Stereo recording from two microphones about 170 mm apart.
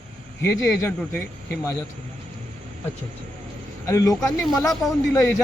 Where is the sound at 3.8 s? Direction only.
20° left (ahead or behind).